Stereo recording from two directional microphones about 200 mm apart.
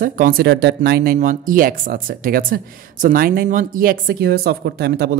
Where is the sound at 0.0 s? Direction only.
45° right (ahead or behind).